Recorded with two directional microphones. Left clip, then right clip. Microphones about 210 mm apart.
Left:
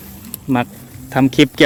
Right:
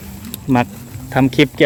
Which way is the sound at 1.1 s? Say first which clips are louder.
Left 1 dB; 15° left (ahead or behind).